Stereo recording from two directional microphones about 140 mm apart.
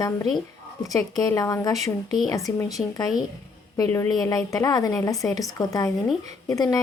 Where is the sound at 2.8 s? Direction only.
5° left (ahead or behind).